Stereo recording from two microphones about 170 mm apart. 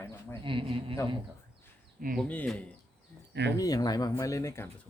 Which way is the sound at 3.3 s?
90° right.